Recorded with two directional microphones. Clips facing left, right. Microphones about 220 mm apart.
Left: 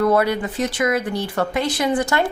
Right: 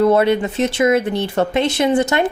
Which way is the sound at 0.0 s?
25° right (ahead or behind).